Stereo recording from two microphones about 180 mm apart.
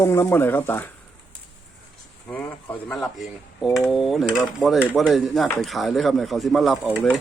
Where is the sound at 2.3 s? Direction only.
10° left (ahead or behind).